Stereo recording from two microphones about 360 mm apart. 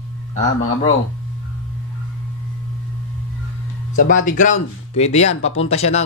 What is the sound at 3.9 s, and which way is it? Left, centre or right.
A man's voice, left.